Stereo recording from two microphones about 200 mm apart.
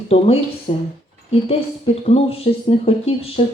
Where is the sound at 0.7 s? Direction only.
35° left (ahead or behind).